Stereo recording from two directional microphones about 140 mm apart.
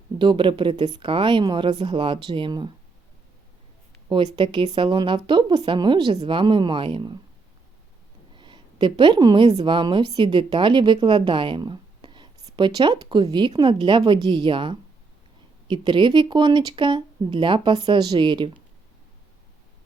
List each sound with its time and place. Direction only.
0.2 s a woman's voice: 35° right (ahead or behind)
4.1 s a woman's voice: 35° right (ahead or behind)
8.4 s a woman's voice: 35° right (ahead or behind)